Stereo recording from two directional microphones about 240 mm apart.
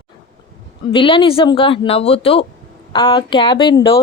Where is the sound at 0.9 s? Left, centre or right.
Left.